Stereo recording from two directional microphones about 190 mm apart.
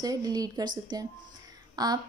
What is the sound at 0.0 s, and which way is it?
Speech, 20° right (ahead or behind).